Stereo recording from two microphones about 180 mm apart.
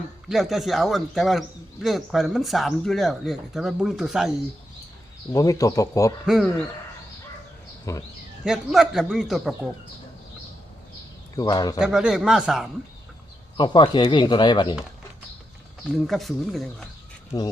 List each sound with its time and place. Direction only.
0.3 s a man's voice: centre (ahead or behind)
5.3 s speech: 20° left (ahead or behind)
6.2 s a man's voice: centre (ahead or behind)
7.9 s speech: 15° left (ahead or behind)
8.4 s a man's voice: centre (ahead or behind)
11.3 s speech: 20° left (ahead or behind)
11.8 s a man's voice: 5° right (ahead or behind)
13.6 s speech: 25° left (ahead or behind)
16.0 s a man's voice: centre (ahead or behind)
17.3 s speech: 25° left (ahead or behind)